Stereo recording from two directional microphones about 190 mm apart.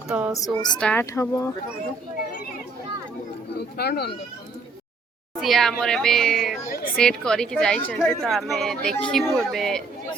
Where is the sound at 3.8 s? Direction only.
60° left (ahead or behind).